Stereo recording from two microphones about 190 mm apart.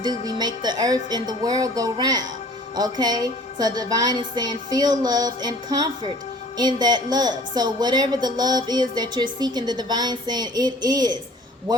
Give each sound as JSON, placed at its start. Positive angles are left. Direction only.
{"t": 0.0, "sound": "a woman's voice", "side_deg": -20}